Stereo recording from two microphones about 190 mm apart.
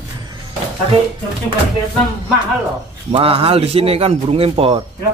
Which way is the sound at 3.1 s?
30° right (ahead or behind).